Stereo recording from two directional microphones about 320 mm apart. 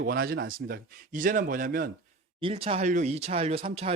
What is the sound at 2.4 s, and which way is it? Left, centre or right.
A man's voice, centre.